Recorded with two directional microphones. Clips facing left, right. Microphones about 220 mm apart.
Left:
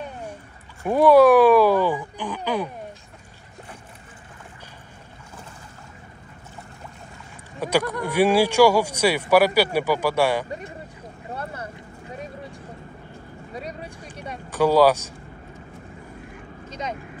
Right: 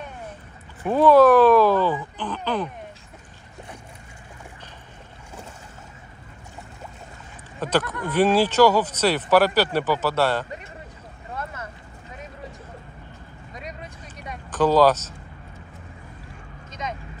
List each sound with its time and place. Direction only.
0.8 s a sound: 10° left (ahead or behind)
7.6 s speech: 10° left (ahead or behind)
11.3 s vehicle: 35° left (ahead or behind)
13.5 s vehicle: 35° left (ahead or behind)
14.5 s speech: 10° left (ahead or behind)
16.6 s vehicle: 30° left (ahead or behind)